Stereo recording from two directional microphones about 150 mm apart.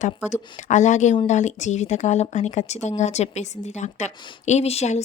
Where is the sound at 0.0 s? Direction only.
55° left (ahead or behind).